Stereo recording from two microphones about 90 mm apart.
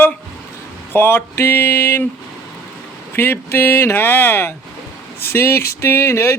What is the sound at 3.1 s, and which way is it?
Speech, 25° left (ahead or behind).